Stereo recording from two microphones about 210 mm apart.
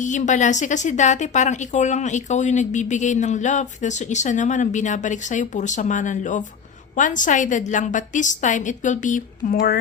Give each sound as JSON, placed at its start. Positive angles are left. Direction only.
{"t": 0.0, "sound": "a woman's voice", "side_deg": 35}